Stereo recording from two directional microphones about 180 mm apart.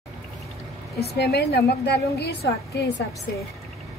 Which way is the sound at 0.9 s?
65° left (ahead or behind).